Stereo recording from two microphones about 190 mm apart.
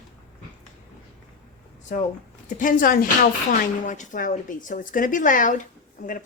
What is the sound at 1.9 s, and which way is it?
Speech, 45° left (ahead or behind).